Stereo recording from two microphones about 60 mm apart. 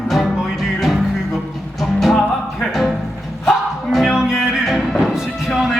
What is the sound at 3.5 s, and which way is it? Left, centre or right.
Music, centre.